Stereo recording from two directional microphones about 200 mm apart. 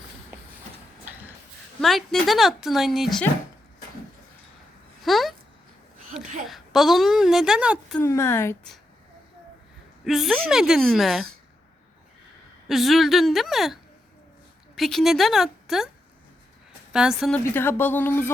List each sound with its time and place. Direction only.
1.8 s a woman's voice: centre (ahead or behind)
5.0 s a sound: centre (ahead or behind)
6.1 s a sound: 40° right (ahead or behind)
6.5 s a woman's voice: centre (ahead or behind)
7.9 s a woman's voice: 15° left (ahead or behind)
10.0 s a woman's voice: centre (ahead or behind)
12.6 s a woman's voice: centre (ahead or behind)
14.8 s a woman's voice: centre (ahead or behind)
16.9 s a woman's voice: 5° right (ahead or behind)
17.5 s a woman's voice: 10° left (ahead or behind)